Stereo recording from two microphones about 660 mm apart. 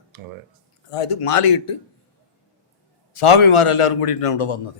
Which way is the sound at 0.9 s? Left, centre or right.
Left.